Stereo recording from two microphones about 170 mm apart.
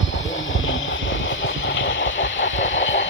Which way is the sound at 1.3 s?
90° left.